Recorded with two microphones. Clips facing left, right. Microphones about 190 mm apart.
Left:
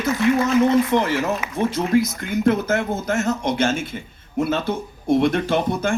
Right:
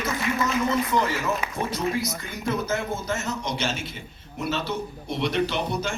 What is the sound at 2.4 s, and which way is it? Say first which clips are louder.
A man's voice: left 8 dB; 60° left (ahead or behind).